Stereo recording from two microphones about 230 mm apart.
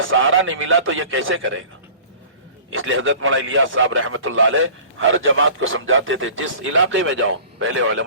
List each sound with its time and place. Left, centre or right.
0.0 s a man's voice: right
2.6 s a man's voice: right